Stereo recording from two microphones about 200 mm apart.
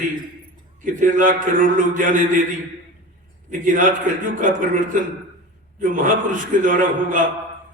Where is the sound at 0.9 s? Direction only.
40° right (ahead or behind).